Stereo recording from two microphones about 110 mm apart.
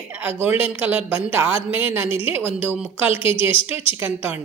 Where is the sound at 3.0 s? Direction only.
60° left (ahead or behind).